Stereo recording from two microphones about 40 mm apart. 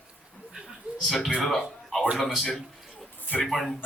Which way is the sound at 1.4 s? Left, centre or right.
Centre.